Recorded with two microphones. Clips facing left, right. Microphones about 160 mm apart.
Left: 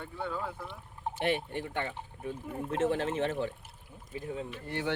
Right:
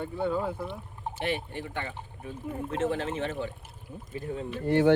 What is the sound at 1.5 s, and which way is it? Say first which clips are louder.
Speech: left 1 dB; 55° left (ahead or behind).